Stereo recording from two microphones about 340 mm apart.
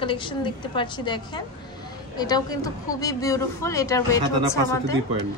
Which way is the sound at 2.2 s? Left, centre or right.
Centre.